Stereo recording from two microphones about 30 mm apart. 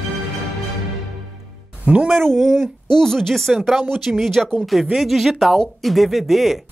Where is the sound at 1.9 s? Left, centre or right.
Right.